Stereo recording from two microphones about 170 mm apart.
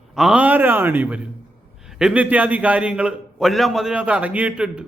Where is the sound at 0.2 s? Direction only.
5° right (ahead or behind).